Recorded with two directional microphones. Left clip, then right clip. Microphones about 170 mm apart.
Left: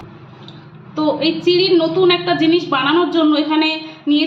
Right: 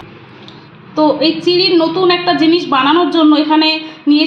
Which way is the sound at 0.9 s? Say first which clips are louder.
Right 5 dB; 50° right (ahead or behind).